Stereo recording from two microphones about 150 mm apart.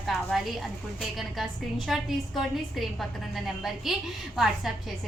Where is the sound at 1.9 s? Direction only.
Centre (ahead or behind).